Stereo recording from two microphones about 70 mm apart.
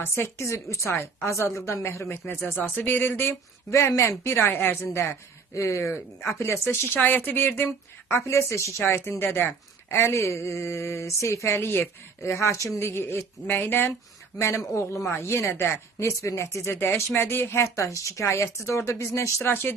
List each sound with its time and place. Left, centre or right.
0.0 s speech: left
2.6 s speech: left
3.7 s speech: left
8.0 s speech: left
17.2 s speech: left